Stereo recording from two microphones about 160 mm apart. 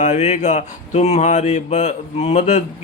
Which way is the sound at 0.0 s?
45° left (ahead or behind).